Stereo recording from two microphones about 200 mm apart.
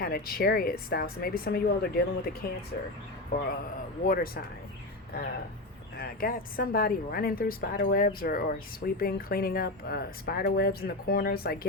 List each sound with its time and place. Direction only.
0.0 s a woman's voice: 50° left (ahead or behind)
3.5 s a woman's voice: 45° left (ahead or behind)
6.0 s a woman's voice: 45° left (ahead or behind)